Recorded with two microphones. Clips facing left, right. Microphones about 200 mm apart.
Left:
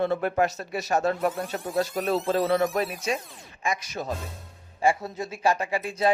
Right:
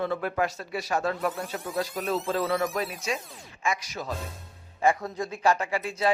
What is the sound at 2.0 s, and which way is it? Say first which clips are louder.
Speech: left 2 dB; 30° left (ahead or behind).